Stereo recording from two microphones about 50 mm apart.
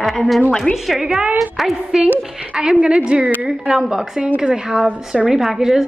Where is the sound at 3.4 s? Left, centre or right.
Centre.